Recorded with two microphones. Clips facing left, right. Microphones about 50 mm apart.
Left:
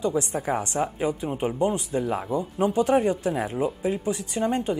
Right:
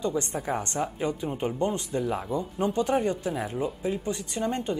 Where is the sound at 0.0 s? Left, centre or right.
Centre.